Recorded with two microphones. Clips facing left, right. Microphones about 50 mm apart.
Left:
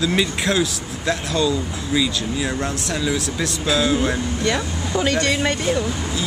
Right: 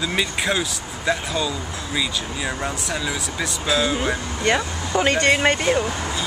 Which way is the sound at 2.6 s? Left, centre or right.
Centre.